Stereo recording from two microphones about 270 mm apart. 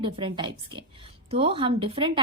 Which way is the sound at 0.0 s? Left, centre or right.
Centre.